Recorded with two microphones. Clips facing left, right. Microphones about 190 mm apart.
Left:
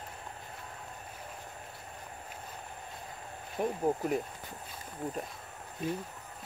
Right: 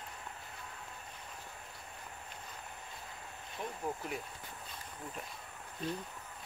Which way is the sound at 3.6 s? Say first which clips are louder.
Left 10 dB; 45° left (ahead or behind).